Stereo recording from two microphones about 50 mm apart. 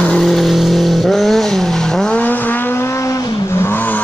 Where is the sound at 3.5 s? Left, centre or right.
Left.